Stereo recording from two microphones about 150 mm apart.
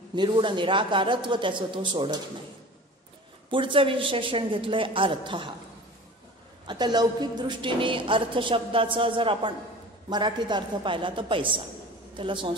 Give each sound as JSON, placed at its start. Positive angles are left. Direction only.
{"t": 0.1, "sound": "a woman's voice", "side_deg": -30}
{"t": 3.4, "sound": "a woman's voice", "side_deg": -35}
{"t": 6.6, "sound": "a woman's voice", "side_deg": -30}